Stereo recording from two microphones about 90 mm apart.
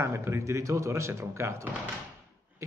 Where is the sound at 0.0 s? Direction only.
30° right (ahead or behind).